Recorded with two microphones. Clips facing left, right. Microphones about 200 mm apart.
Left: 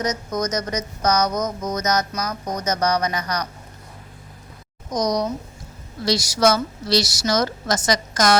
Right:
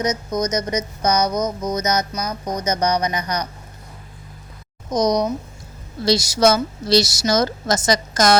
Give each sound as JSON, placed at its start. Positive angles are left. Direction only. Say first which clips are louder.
{"t": 0.0, "sound": "a woman's voice", "louder": "right 2 dB", "side_deg": -20}
{"t": 1.3, "sound": "speech", "louder": "right 2 dB", "side_deg": 0}
{"t": 1.8, "sound": "music", "louder": "even", "side_deg": 45}
{"t": 2.1, "sound": "speech", "louder": "right 1 dB", "side_deg": 0}
{"t": 2.6, "sound": "a woman's voice", "louder": "right 1 dB", "side_deg": -20}
{"t": 4.9, "sound": "a woman's voice", "louder": "right 3 dB", "side_deg": -25}